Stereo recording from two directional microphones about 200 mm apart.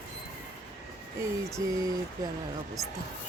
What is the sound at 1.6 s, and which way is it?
Speech, 15° right (ahead or behind).